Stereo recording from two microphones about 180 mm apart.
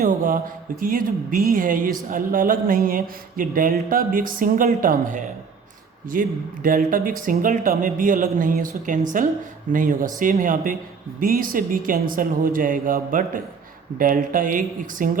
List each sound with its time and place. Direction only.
0.8 s speech: 50° right (ahead or behind)